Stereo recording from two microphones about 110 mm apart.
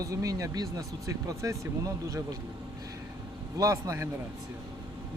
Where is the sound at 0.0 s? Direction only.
30° right (ahead or behind).